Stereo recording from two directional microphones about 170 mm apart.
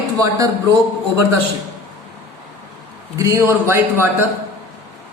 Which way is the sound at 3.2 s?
15° right (ahead or behind).